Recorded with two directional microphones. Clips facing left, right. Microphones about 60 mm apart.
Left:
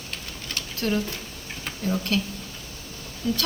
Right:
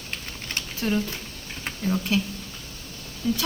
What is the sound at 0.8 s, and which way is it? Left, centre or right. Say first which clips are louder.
Speech: even; centre.